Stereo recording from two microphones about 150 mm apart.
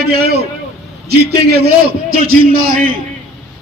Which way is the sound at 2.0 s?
75° right (ahead or behind).